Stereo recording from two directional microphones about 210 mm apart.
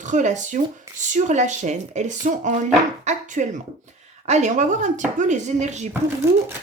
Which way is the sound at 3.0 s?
35° right (ahead or behind).